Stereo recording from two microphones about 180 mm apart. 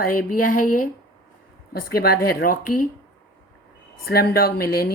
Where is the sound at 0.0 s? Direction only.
50° left (ahead or behind).